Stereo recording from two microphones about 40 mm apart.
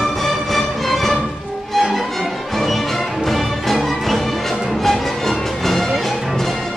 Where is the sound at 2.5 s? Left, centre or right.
Centre.